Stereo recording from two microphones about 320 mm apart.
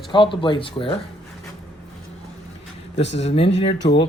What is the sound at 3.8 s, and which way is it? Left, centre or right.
Speech, left.